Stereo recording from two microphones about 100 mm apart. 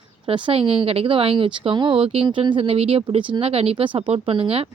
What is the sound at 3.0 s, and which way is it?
Speech, 60° right (ahead or behind).